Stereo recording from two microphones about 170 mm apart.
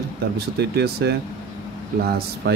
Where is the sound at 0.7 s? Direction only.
70° right (ahead or behind).